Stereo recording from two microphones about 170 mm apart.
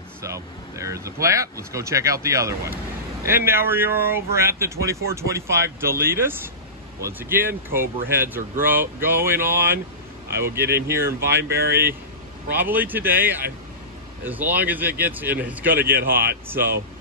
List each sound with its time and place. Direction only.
0.2 s speech: 15° right (ahead or behind)
11.4 s speech: 70° right (ahead or behind)
12.5 s speech: 10° right (ahead or behind)